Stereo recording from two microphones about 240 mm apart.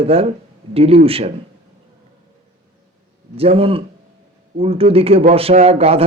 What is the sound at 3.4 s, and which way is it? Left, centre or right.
Speech, right.